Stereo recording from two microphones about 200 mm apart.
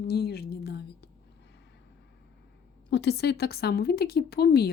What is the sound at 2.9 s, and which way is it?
Speech, 60° left (ahead or behind).